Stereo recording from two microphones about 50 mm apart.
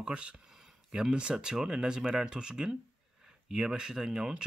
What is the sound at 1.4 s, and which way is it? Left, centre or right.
Speech, centre.